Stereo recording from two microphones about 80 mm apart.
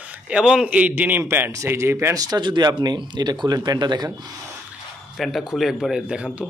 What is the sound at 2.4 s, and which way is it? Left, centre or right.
Speech, right.